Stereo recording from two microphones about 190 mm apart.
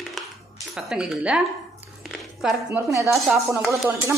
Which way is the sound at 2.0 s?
Centre (ahead or behind).